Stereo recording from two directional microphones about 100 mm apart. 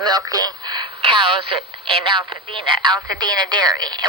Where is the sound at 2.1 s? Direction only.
55° right (ahead or behind).